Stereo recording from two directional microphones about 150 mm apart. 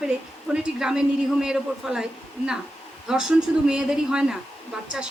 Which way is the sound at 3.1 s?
5° right (ahead or behind).